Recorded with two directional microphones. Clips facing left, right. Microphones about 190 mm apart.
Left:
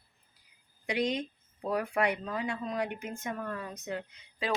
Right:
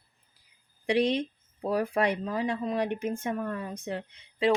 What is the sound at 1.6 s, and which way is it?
Speech, 30° right (ahead or behind).